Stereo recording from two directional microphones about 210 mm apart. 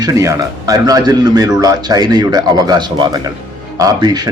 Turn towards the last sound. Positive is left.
turn(degrees=-20)  # may be behind; listen again after turning